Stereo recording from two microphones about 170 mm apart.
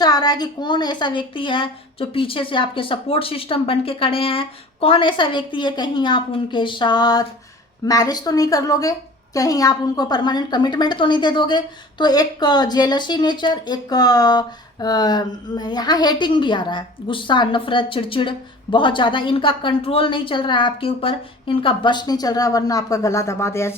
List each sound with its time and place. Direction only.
0.0 s a woman's voice: 25° left (ahead or behind)